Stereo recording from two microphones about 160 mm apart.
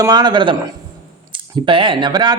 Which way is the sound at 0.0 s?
25° right (ahead or behind).